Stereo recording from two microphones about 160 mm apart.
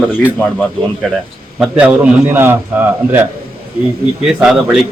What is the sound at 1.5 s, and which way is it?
A man's voice, 5° right (ahead or behind).